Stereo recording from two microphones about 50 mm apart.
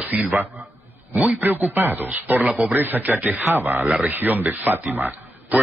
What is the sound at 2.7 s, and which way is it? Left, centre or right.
Speech, right.